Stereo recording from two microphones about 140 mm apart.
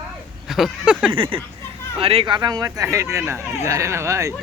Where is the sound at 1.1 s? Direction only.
40° right (ahead or behind); by 4.4 s 20° right (ahead or behind).